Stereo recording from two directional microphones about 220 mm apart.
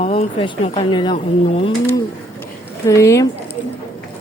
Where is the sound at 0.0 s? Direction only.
30° left (ahead or behind).